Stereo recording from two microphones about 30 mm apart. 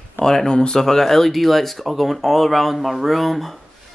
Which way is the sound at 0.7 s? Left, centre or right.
Centre.